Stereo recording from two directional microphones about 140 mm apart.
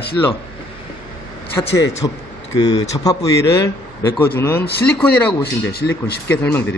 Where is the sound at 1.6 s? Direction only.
20° left (ahead or behind).